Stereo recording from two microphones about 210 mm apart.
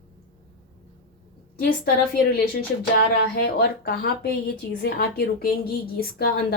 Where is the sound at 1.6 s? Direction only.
50° left (ahead or behind).